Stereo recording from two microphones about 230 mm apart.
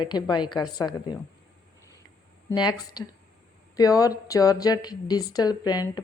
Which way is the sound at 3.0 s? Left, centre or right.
Centre.